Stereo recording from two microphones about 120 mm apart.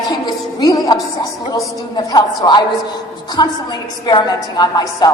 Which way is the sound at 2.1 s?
35° left (ahead or behind).